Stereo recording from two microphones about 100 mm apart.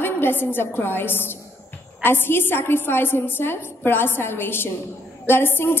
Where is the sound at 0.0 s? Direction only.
20° left (ahead or behind).